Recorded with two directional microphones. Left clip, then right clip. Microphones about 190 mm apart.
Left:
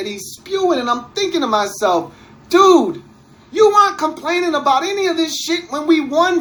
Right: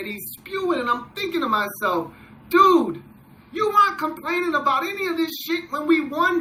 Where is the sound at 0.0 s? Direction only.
45° right (ahead or behind).